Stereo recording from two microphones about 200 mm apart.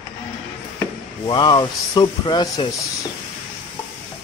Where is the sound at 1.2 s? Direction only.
20° left (ahead or behind).